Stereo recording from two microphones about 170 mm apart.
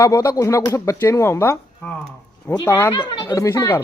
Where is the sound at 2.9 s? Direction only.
25° left (ahead or behind).